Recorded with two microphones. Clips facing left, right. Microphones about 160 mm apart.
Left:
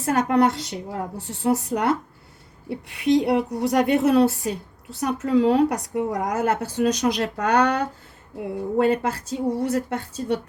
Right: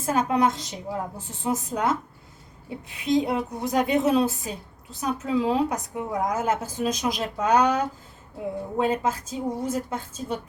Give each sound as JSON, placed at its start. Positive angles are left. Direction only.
{"t": 0.0, "sound": "a woman's voice", "side_deg": 65}